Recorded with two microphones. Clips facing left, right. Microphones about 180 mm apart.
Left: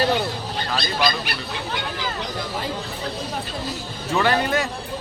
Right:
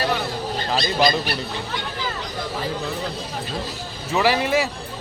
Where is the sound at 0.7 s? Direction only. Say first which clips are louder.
Right 4 dB; 25° right (ahead or behind).